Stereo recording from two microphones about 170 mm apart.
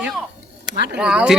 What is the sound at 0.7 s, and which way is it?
Speech, 90° right.